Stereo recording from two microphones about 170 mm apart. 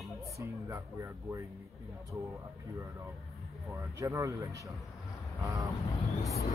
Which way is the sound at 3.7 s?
20° right (ahead or behind).